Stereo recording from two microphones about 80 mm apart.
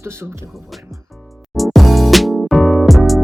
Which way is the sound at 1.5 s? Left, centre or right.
Centre.